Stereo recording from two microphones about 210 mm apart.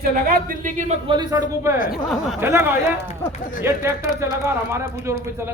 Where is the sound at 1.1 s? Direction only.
20° right (ahead or behind).